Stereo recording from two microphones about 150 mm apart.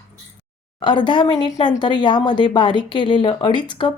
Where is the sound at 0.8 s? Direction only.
30° left (ahead or behind).